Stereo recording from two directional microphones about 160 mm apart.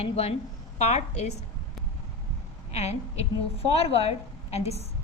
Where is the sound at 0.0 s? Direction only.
40° left (ahead or behind).